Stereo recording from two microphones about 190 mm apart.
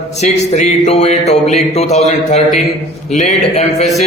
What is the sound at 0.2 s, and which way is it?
Speech, 35° left (ahead or behind).